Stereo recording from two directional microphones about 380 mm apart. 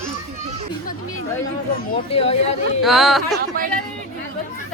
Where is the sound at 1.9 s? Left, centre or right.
Centre.